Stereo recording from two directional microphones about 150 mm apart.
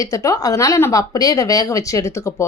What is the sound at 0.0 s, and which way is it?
A woman's voice, 20° left (ahead or behind).